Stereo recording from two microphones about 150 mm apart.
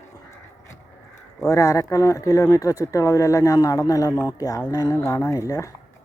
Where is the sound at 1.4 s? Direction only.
20° left (ahead or behind).